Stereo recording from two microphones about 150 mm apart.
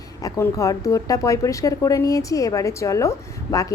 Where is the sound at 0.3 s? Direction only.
20° left (ahead or behind).